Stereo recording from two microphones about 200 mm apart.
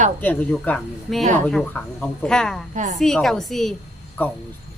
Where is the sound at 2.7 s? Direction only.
35° right (ahead or behind).